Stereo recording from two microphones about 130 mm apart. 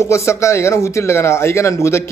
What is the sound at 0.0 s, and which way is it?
Speech, 20° left (ahead or behind).